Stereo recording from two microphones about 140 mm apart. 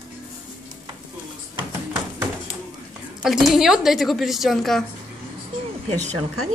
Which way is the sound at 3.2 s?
5° right (ahead or behind).